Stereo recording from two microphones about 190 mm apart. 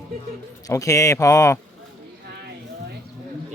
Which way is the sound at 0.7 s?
15° left (ahead or behind).